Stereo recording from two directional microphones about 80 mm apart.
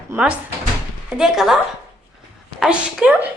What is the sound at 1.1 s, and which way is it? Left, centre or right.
Speech, centre.